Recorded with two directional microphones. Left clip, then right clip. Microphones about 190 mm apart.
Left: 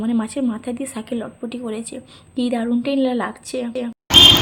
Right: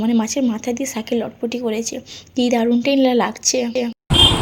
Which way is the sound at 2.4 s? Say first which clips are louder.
Right 5 dB; 10° right (ahead or behind).